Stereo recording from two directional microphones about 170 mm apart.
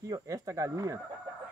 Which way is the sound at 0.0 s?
20° right (ahead or behind).